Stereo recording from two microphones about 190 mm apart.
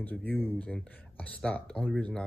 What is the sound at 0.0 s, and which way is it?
Speech, 10° left (ahead or behind).